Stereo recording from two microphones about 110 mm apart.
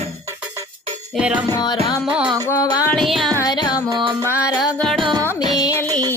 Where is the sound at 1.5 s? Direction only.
35° left (ahead or behind).